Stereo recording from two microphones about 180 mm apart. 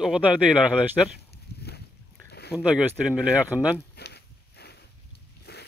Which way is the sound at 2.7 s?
5° right (ahead or behind).